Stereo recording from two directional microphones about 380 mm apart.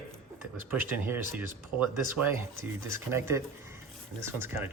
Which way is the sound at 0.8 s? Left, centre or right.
Centre.